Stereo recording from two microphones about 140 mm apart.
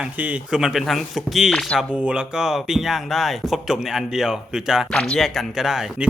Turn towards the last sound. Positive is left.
turn(degrees=-5)  # may be behind; listen again after turning